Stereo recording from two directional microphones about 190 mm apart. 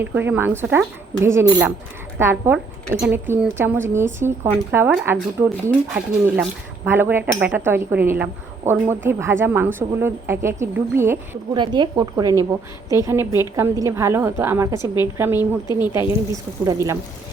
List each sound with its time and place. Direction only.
0.0 s speech: 10° right (ahead or behind)
11.5 s a woman's voice: 25° right (ahead or behind)